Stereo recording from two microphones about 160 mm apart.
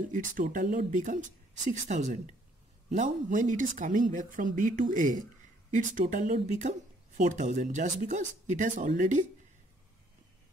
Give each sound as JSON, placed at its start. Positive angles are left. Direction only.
{"t": 0.1, "sound": "speech", "side_deg": -55}